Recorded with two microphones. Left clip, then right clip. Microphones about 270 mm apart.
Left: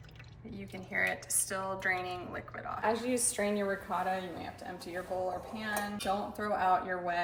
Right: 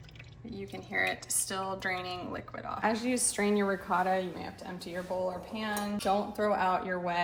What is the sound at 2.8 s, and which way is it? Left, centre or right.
A woman's voice, right.